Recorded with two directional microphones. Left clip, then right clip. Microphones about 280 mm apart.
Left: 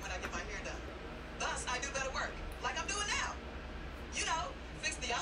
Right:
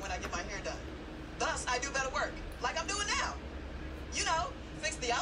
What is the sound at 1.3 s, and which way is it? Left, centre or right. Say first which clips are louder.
A woman's voice: right 4 dB; right.